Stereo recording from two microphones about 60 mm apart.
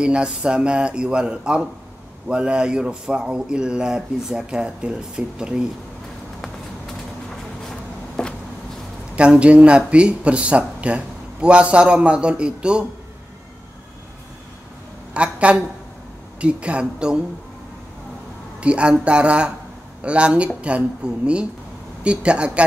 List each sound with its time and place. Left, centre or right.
0.0 s speech: centre
6.4 s a sound: centre
9.1 s speech: centre
15.1 s a woman's voice: right
18.6 s speech: centre